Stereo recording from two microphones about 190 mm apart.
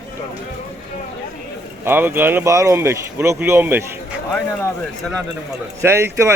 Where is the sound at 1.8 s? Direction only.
10° right (ahead or behind).